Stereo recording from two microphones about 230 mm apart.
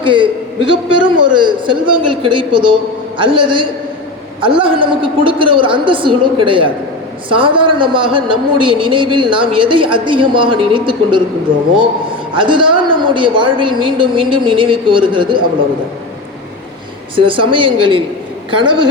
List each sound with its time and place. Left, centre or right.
0.0 s a man's voice: right
12.3 s speech: right
17.2 s speech: right